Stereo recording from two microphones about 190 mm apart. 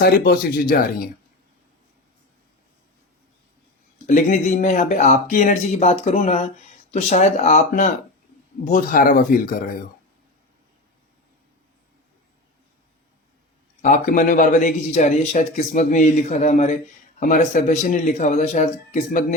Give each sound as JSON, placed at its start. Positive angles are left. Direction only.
{"t": 0.0, "sound": "speech", "side_deg": 55}
{"t": 4.0, "sound": "a man's voice", "side_deg": 40}
{"t": 13.8, "sound": "a man's voice", "side_deg": 40}